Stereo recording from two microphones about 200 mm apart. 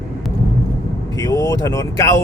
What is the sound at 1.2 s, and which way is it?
Speech, 15° left (ahead or behind).